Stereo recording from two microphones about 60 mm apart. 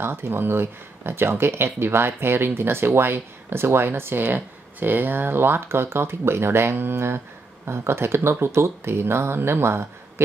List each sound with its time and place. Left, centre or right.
0.0 s speech: right